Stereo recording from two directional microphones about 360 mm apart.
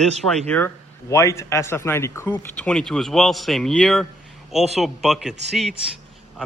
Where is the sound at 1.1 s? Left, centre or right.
Centre.